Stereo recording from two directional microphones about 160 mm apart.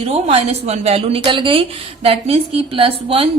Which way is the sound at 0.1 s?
35° right (ahead or behind).